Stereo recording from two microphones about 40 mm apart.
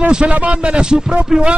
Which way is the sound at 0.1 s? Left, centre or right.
Right.